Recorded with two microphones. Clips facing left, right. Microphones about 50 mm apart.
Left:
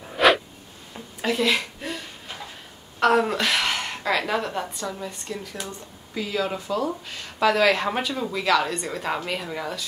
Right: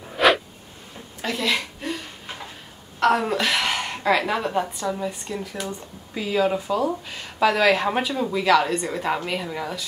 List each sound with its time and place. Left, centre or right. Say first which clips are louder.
0.0 s a sound: even; centre
1.2 s a woman's voice: left 2 dB; centre
3.0 s speech: even; centre